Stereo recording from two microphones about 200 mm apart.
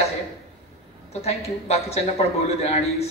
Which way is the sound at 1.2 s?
30° left (ahead or behind).